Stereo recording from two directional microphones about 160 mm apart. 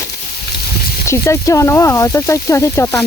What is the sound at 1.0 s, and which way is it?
Speech, 20° left (ahead or behind).